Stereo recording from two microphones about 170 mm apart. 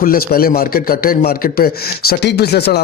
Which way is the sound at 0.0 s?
60° left (ahead or behind).